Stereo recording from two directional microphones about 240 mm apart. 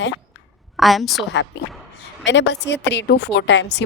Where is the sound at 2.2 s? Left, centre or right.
Left.